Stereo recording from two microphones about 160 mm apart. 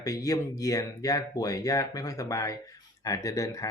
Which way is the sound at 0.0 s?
20° left (ahead or behind).